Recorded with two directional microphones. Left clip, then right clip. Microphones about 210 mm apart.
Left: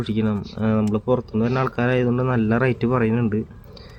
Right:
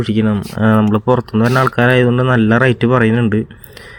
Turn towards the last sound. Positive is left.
turn(degrees=-20)  # may be behind; listen again after turning